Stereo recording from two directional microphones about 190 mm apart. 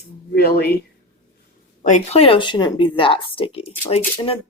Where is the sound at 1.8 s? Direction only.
40° left (ahead or behind).